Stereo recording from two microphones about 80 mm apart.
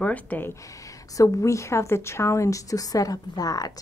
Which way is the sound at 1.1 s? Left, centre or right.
Left.